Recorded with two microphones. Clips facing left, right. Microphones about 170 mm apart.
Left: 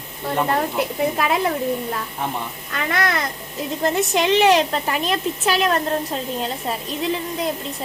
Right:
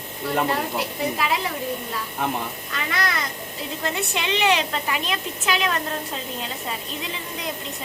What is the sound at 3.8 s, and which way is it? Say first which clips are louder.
A woman's voice: left 8 dB; 40° left (ahead or behind).